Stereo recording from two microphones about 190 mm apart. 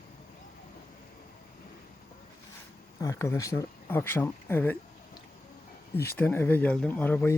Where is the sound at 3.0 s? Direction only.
15° left (ahead or behind).